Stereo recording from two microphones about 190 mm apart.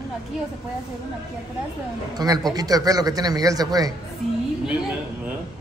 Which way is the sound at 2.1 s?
20° right (ahead or behind).